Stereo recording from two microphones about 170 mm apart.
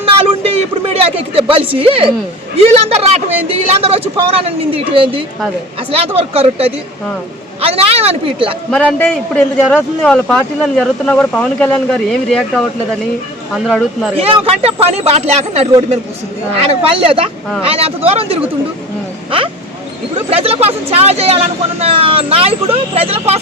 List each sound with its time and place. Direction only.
0.0 s a sound: 35° right (ahead or behind)
2.6 s a woman's voice: 35° right (ahead or behind)
8.7 s a man's voice: 5° left (ahead or behind)
13.7 s a man's voice: centre (ahead or behind)
14.2 s a woman's voice: 35° right (ahead or behind)
16.9 s a woman's voice: 30° right (ahead or behind)
20.3 s a woman's voice: 35° right (ahead or behind)